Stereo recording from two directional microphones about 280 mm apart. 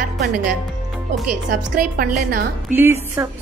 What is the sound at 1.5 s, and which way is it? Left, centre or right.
Speech, right.